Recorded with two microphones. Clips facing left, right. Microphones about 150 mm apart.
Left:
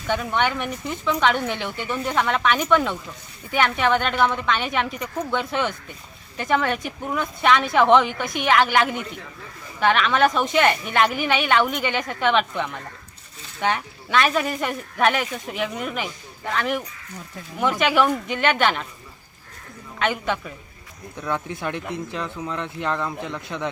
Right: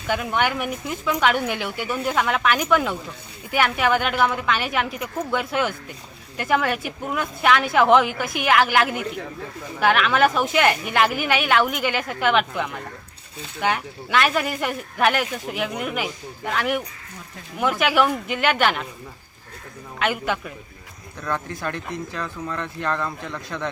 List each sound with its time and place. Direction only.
0.1 s speech: 5° right (ahead or behind)
20.0 s speech: 5° right (ahead or behind)
21.2 s speech: 15° left (ahead or behind)